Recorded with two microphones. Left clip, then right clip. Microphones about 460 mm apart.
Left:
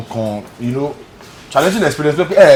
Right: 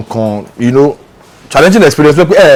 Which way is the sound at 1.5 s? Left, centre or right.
Right.